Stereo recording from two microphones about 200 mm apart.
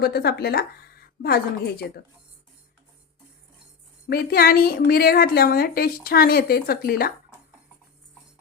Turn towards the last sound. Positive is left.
turn(degrees=50)  # may be behind; listen again after turning